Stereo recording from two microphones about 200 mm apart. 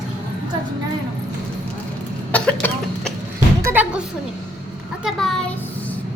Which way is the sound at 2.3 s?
5° left (ahead or behind).